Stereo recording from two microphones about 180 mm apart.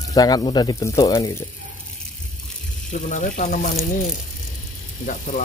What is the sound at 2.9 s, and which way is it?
Speech, 45° left (ahead or behind).